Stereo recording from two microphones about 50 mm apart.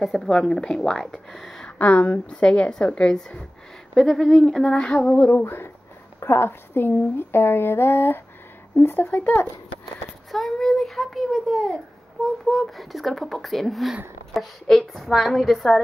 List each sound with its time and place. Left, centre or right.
0.0 s a child's voice: centre
0.4 s speech: centre
1.8 s a woman's voice: left
3.9 s speech: centre
4.8 s a woman's voice: left
5.1 s a woman's voice: left
5.4 s speech: left
9.0 s a woman's voice: left
10.3 s a child's voice: centre